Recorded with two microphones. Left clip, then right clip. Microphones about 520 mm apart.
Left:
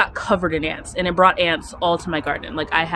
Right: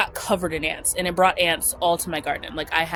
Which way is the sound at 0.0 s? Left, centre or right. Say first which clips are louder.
Left 4 dB; right.